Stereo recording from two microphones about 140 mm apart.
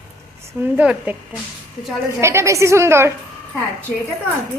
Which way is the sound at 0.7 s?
10° right (ahead or behind).